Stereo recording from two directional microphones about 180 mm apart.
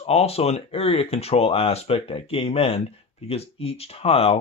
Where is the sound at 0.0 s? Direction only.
35° left (ahead or behind).